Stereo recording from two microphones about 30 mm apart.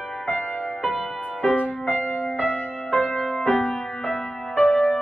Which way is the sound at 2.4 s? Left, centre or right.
Left.